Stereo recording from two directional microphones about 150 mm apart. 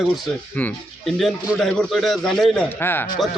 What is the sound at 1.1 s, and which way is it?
A man's voice, centre (ahead or behind).